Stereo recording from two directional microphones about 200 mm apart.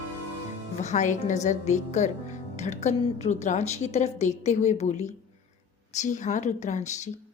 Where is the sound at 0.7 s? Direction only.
35° left (ahead or behind).